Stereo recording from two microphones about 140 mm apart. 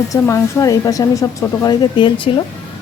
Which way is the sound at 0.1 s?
20° left (ahead or behind).